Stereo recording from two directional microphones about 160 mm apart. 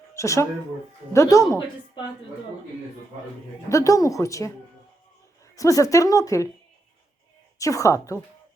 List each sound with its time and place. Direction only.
0.1 s a woman's voice: 20° left (ahead or behind)
3.7 s a woman's voice: 20° left (ahead or behind)
5.5 s a woman's voice: 20° left (ahead or behind)
7.6 s a woman's voice: 20° left (ahead or behind)